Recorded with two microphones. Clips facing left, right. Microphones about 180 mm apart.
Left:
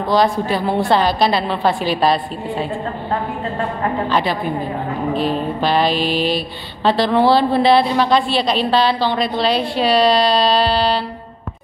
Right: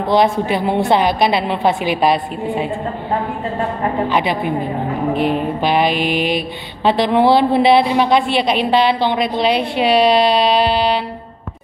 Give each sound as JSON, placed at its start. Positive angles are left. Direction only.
{"t": 0.0, "sound": "mantra", "side_deg": -25}
{"t": 4.1, "sound": "mantra", "side_deg": -20}